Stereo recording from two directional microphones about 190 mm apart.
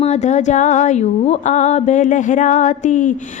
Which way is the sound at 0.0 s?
35° left (ahead or behind).